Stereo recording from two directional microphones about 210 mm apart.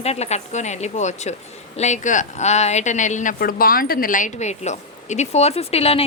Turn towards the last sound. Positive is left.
turn(degrees=30)  # may be behind; listen again after turning